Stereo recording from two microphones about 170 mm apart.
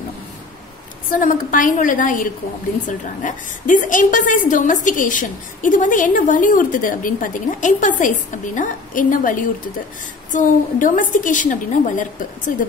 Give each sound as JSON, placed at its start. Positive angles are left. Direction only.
{"t": 1.1, "sound": "a woman's voice", "side_deg": 50}